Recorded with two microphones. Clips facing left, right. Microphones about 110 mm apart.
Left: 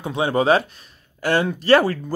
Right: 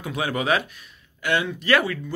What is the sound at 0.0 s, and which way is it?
Speech, 30° left (ahead or behind).